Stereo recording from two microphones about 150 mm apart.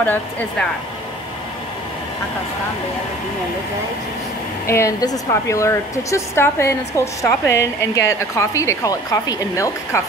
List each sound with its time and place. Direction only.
0.0 s speech: 10° left (ahead or behind)
4.6 s a woman's voice: 20° left (ahead or behind)